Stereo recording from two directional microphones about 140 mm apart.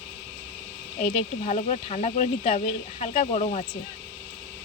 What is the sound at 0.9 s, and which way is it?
Speech, 50° left (ahead or behind).